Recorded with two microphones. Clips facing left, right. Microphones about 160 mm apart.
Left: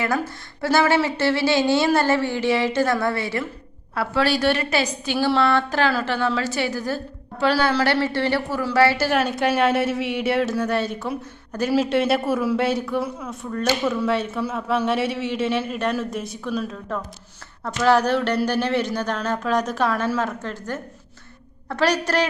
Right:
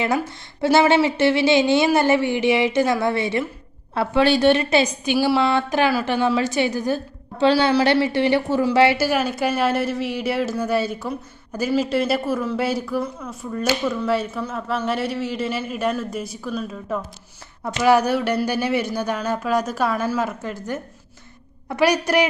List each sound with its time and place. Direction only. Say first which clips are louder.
0.6 s a woman's voice: right 3 dB; 20° right (ahead or behind)
5.1 s speech: right 1 dB; 10° right (ahead or behind)
9.0 s a woman's voice: even; 5° right (ahead or behind)